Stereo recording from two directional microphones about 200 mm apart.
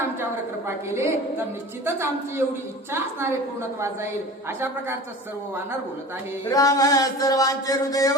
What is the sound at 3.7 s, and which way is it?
Speech, 15° right (ahead or behind).